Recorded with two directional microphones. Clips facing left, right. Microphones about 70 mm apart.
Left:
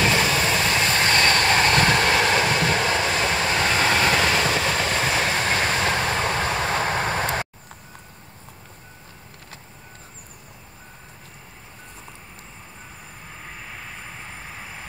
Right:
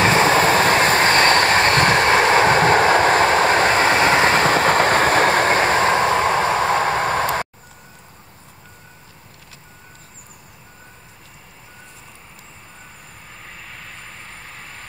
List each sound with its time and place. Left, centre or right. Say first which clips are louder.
0.0 s vehicle: right 6 dB; right
13.4 s train: left 1 dB; centre